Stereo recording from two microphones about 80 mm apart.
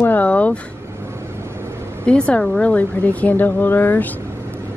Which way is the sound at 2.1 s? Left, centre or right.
Centre.